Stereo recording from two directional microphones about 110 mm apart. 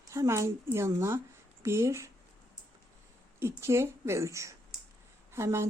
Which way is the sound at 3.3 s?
25° right (ahead or behind).